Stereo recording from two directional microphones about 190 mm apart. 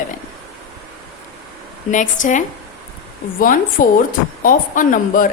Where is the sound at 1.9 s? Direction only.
40° left (ahead or behind).